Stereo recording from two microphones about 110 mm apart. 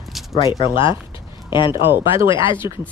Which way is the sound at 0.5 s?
45° left (ahead or behind).